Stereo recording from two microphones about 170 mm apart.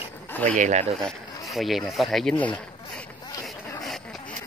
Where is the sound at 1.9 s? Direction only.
Centre (ahead or behind).